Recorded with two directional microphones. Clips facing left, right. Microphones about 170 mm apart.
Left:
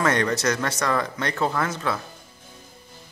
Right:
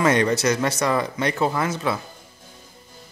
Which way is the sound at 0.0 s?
10° right (ahead or behind).